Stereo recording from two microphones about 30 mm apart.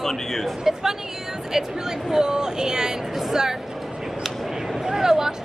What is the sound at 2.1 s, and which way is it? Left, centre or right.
Speech, right.